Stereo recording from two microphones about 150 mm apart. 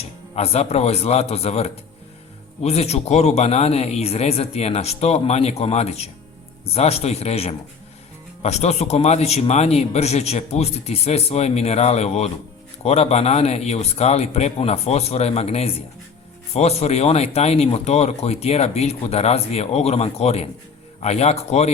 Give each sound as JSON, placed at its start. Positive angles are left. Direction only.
{"t": 0.0, "sound": "speech", "side_deg": 45}